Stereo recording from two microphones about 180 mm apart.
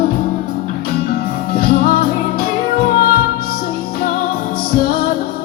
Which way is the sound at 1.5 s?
55° left (ahead or behind).